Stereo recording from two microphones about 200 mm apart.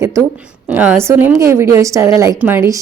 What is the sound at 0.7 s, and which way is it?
A woman's voice, 15° right (ahead or behind).